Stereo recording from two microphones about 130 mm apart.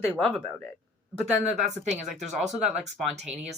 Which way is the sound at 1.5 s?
65° right (ahead or behind).